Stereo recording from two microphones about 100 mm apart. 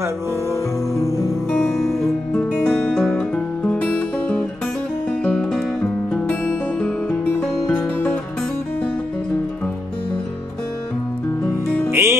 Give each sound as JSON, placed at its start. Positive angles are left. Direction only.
{"t": 0.9, "sound": "music", "side_deg": 30}
{"t": 1.5, "sound": "music", "side_deg": 5}
{"t": 6.8, "sound": "music", "side_deg": 15}
{"t": 11.9, "sound": "music", "side_deg": -25}